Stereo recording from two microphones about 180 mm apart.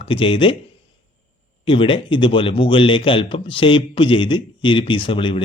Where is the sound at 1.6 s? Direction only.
30° left (ahead or behind).